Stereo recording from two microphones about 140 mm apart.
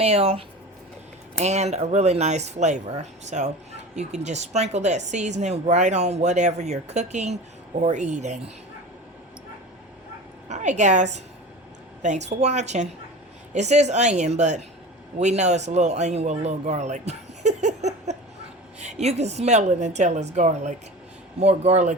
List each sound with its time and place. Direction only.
0.0 s a woman's voice: 45° right (ahead or behind)
10.5 s a woman's voice: 55° right (ahead or behind)